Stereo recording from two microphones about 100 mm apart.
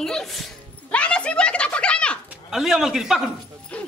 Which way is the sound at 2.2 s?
5° right (ahead or behind).